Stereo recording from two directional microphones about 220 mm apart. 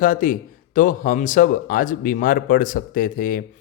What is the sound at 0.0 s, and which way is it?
Speech, 40° left (ahead or behind).